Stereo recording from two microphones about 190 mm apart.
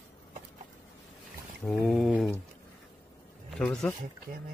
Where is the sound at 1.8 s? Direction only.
Centre (ahead or behind).